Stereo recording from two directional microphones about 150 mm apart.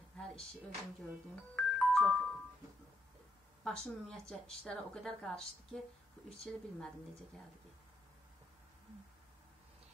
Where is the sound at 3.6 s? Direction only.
5° left (ahead or behind).